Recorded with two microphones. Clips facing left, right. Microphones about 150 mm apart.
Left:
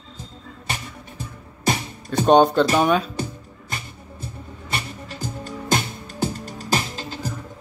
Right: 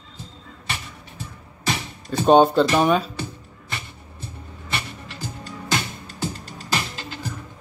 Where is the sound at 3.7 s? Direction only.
40° left (ahead or behind).